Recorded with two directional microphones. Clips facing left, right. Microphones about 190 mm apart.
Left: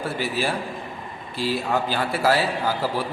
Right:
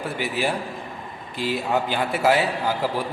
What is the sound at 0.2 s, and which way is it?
A man's voice, 15° right (ahead or behind).